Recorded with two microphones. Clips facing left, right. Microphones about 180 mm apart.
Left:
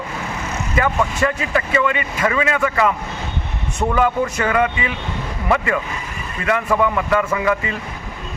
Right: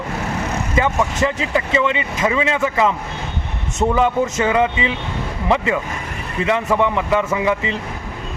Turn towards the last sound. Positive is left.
turn(degrees=-20)  # may be behind; listen again after turning